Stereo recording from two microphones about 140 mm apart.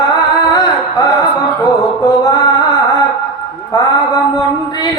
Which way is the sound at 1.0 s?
25° left (ahead or behind).